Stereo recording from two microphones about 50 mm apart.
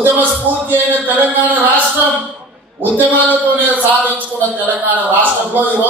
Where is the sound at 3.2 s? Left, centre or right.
Right.